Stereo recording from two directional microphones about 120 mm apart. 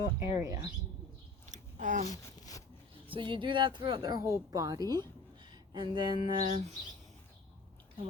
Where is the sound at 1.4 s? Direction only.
90° right.